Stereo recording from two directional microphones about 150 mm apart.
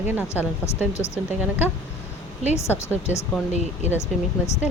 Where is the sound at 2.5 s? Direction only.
15° left (ahead or behind).